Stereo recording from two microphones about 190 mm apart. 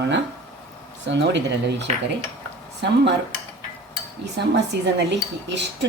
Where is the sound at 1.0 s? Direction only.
65° right (ahead or behind).